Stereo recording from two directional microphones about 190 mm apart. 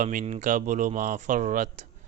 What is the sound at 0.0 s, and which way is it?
Speech, 45° right (ahead or behind).